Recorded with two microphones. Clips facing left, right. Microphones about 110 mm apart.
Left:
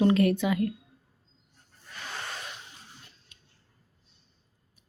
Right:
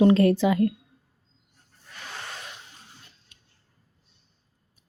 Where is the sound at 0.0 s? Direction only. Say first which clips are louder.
Right 5 dB; 30° right (ahead or behind).